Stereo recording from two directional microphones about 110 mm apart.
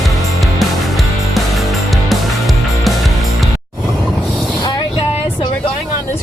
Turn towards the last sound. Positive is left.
turn(degrees=45)  # may be behind; listen again after turning